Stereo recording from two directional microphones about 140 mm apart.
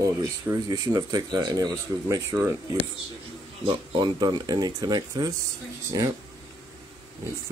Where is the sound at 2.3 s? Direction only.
15° right (ahead or behind).